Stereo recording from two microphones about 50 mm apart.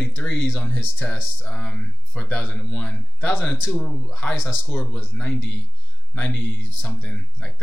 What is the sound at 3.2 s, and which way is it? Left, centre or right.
Speech, left.